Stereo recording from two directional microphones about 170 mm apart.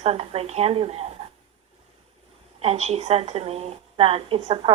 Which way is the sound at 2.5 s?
40° right (ahead or behind).